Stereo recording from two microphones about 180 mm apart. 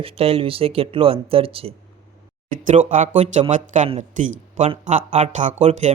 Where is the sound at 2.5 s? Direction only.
45° right (ahead or behind).